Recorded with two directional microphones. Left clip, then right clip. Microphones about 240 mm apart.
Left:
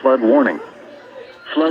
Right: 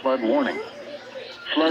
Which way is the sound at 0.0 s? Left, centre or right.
Left.